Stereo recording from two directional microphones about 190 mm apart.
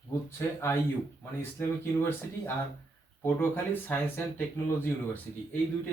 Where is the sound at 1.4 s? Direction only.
10° left (ahead or behind).